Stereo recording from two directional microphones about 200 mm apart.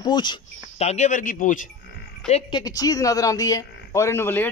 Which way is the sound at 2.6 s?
20° left (ahead or behind).